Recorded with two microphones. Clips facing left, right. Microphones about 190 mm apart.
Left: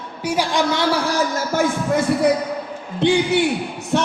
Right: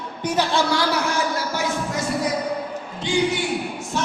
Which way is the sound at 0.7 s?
25° left (ahead or behind).